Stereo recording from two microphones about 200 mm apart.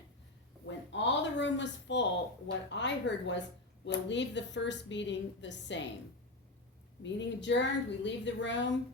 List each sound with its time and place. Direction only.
0.6 s a sound: 60° left (ahead or behind)
2.6 s a woman's voice: 65° left (ahead or behind)
7.0 s a woman's voice: 65° left (ahead or behind)